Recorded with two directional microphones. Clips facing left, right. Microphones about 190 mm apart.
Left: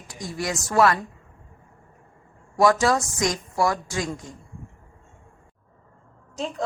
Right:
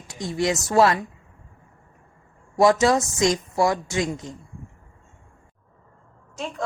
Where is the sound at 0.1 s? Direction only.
25° right (ahead or behind).